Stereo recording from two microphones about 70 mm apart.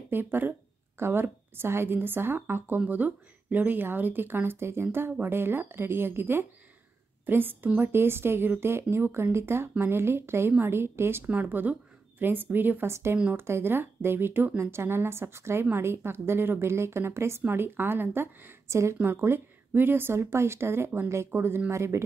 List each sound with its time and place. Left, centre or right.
0.1 s speech: right
18.7 s speech: right
18.9 s speech: right